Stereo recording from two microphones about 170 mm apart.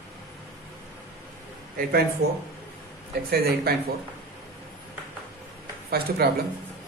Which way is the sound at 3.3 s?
65° right (ahead or behind).